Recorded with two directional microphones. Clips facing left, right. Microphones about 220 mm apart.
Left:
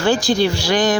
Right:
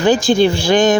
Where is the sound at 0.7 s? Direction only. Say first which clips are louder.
Right 4 dB; 25° right (ahead or behind).